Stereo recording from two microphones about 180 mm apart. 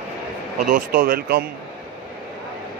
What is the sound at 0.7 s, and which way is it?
Speech, 50° right (ahead or behind).